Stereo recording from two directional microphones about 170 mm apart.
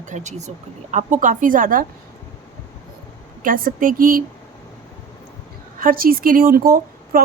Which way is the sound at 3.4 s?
55° right (ahead or behind).